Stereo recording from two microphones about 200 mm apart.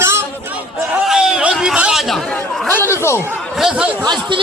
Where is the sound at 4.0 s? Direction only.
25° right (ahead or behind).